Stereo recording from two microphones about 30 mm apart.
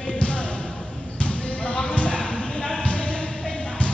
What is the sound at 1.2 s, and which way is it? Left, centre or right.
Basketball bounce, left.